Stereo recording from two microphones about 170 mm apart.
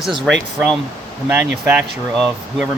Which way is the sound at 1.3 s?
15° right (ahead or behind).